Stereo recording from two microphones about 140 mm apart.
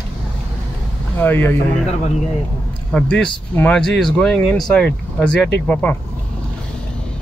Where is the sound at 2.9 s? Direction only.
5° left (ahead or behind).